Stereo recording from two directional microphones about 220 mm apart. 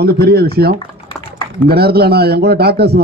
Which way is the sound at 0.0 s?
45° right (ahead or behind).